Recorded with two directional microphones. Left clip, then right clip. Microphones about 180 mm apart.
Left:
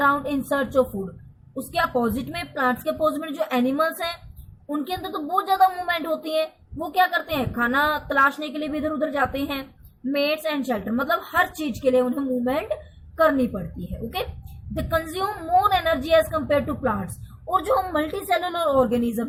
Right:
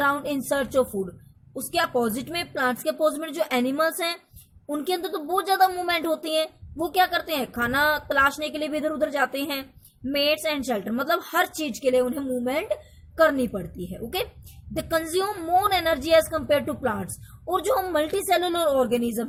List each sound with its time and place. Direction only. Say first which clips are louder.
0.0 s a sound: left 3 dB; 45° right (ahead or behind)
1.5 s a woman's voice: left 1 dB; 45° right (ahead or behind)
14.7 s a woman's voice: even; 45° right (ahead or behind)